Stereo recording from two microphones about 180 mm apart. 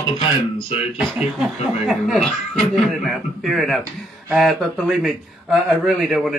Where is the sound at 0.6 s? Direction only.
30° left (ahead or behind).